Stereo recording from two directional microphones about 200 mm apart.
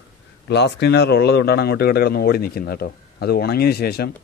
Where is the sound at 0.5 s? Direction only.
60° left (ahead or behind).